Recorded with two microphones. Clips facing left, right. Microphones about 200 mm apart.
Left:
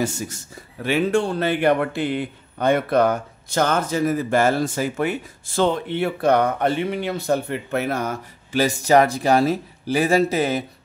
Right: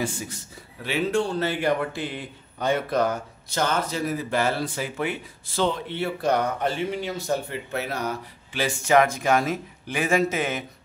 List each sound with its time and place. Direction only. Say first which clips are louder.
0.0 s a man's voice: left 4 dB; 45° left (ahead or behind)